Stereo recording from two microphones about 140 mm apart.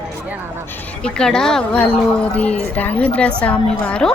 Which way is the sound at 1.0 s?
5° left (ahead or behind).